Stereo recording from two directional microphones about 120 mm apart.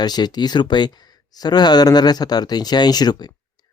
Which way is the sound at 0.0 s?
35° left (ahead or behind).